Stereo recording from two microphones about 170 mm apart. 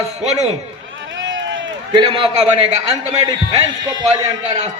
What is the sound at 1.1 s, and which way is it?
Run, 90° right.